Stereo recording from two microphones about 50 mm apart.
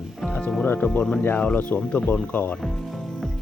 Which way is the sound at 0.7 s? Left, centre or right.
Centre.